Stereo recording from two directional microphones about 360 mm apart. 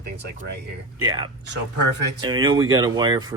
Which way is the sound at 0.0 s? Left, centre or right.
Right.